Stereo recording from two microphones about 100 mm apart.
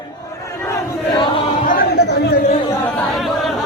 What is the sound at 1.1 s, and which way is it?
Choir, 55° left (ahead or behind).